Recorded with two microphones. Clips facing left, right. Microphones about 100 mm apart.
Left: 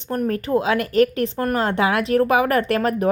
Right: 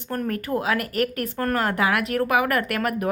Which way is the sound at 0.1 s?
20° left (ahead or behind).